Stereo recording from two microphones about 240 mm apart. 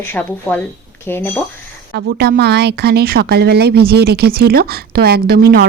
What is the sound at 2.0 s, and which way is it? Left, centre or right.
A woman's voice, right.